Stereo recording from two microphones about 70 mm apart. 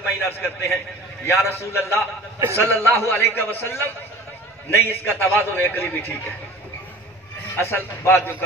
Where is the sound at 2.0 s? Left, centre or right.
Right.